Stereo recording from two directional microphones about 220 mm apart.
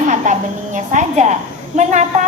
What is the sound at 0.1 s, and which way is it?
A woman's voice, 35° right (ahead or behind).